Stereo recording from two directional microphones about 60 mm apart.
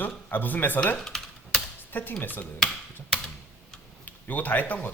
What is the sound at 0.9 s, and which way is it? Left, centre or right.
Typing, centre.